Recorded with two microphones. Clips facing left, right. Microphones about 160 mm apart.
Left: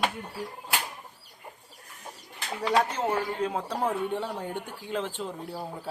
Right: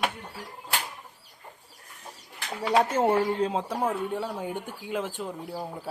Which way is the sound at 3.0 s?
25° right (ahead or behind).